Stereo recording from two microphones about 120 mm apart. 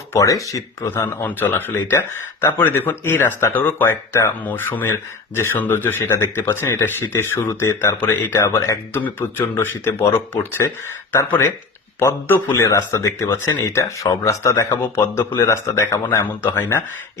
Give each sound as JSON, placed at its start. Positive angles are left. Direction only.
{"t": 0.1, "sound": "speech", "side_deg": 25}